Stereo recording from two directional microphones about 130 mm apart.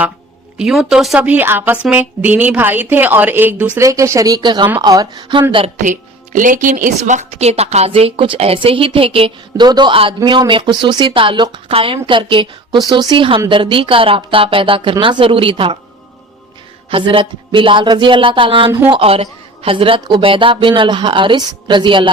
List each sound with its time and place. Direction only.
0.5 s a woman's voice: 5° right (ahead or behind); by 5.7 s 40° right (ahead or behind)
5.7 s a woman's voice: 75° right (ahead or behind); by 15.8 s 40° right (ahead or behind)
16.9 s a woman's voice: 40° right (ahead or behind)